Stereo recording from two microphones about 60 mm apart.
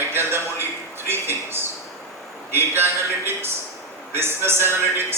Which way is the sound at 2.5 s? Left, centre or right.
Right.